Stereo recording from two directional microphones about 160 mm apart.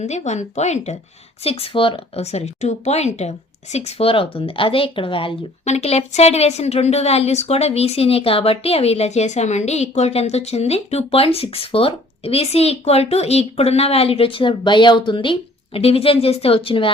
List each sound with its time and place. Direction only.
0.0 s speech: 45° left (ahead or behind)